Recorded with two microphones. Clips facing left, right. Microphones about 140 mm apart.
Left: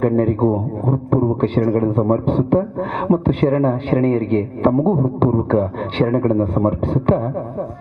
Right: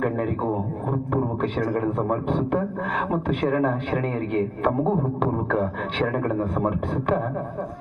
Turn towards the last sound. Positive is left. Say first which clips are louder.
# left 6 dB
turn(degrees=35)  # may be behind; listen again after turning